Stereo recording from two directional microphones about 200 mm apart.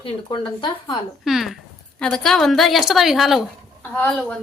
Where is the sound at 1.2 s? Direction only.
Centre (ahead or behind).